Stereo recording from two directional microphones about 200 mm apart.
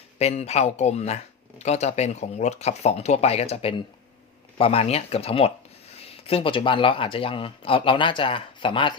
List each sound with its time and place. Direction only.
0.2 s speech: 30° left (ahead or behind)